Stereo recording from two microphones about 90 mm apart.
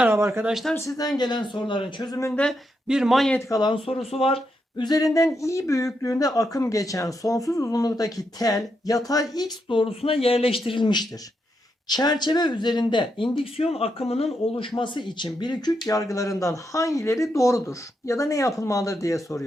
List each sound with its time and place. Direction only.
0.1 s speech: 30° right (ahead or behind)
0.4 s speech: 5° right (ahead or behind)
0.8 s speech: 40° left (ahead or behind); by 2.1 s 60° left (ahead or behind)
2.3 s speech: 10° left (ahead or behind)
2.8 s speech: 5° right (ahead or behind)
3.5 s speech: 50° left (ahead or behind)
3.8 s speech: 90° left
4.8 s speech: 45° left (ahead or behind)
9.6 s speech: 75° left (ahead or behind)
10.7 s speech: 60° left (ahead or behind); by 19.5 s 35° left (ahead or behind)